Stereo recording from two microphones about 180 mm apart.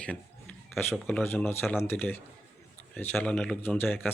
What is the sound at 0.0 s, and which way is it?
A man's voice, 5° left (ahead or behind).